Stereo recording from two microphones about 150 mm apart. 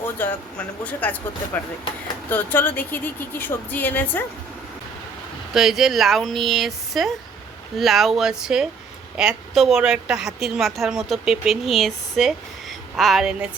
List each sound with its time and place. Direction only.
0.0 s speech: 10° left (ahead or behind)
5.5 s a woman's voice: 5° right (ahead or behind)